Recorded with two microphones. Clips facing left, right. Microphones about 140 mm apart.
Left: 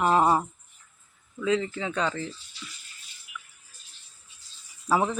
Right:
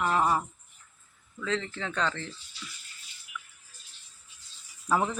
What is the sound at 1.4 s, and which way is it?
Speech, 10° left (ahead or behind).